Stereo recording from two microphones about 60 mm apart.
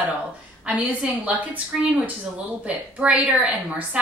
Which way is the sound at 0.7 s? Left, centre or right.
Right.